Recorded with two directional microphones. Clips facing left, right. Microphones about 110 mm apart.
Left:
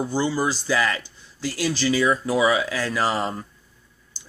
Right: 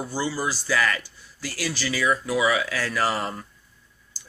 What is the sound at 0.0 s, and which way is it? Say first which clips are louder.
Speech: left 4 dB; 25° left (ahead or behind).